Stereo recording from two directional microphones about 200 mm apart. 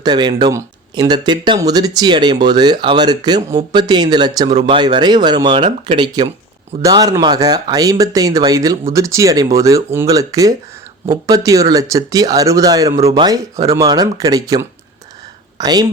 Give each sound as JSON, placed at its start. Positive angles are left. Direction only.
{"t": 0.0, "sound": "speech", "side_deg": -20}